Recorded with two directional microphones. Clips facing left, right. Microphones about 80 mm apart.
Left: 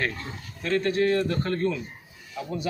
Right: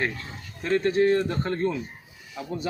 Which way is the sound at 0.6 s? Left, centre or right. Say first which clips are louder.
Right 2 dB; right.